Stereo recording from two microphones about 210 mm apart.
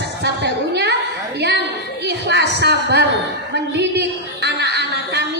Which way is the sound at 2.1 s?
55° right (ahead or behind).